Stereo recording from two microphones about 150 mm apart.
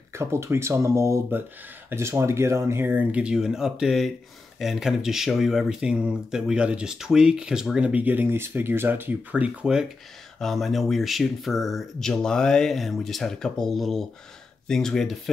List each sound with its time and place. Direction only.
0.1 s speech: 20° right (ahead or behind); by 15.1 s centre (ahead or behind)